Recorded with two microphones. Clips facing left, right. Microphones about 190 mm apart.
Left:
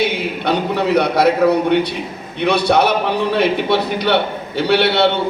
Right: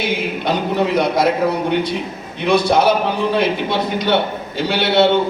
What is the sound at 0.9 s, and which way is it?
Speech, 65° left (ahead or behind).